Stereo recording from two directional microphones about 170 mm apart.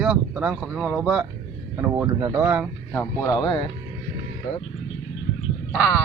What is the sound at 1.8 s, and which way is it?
Speech, 20° right (ahead or behind).